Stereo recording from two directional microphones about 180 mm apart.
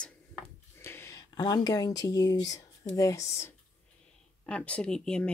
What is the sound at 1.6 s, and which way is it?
Speech, 20° left (ahead or behind).